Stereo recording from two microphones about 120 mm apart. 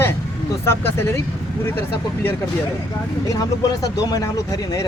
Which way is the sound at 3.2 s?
30° left (ahead or behind).